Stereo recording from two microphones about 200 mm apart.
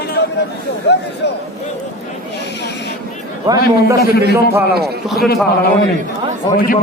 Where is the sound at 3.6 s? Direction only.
55° left (ahead or behind).